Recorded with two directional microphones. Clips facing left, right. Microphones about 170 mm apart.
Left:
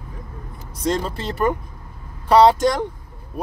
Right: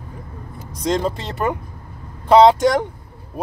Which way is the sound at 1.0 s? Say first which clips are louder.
Right 4 dB; 15° right (ahead or behind).